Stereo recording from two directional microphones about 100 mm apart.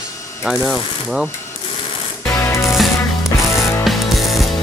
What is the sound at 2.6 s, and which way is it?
Music, centre (ahead or behind).